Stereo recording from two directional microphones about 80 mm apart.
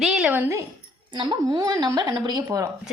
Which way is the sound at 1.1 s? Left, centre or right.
Right.